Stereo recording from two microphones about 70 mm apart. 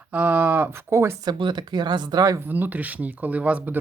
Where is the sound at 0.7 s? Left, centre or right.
Right.